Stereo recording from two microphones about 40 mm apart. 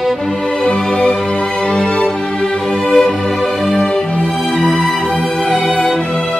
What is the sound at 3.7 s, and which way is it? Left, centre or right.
Music, left.